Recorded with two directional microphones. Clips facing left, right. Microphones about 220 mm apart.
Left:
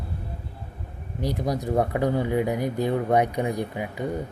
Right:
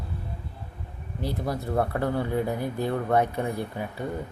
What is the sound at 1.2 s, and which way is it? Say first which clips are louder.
Speech: left 3 dB; 15° left (ahead or behind).